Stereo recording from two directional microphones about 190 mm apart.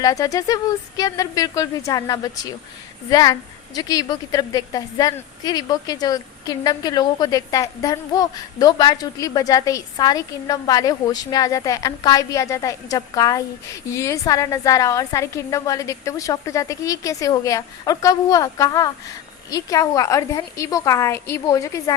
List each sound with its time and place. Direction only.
0.0 s a woman's voice: 15° left (ahead or behind)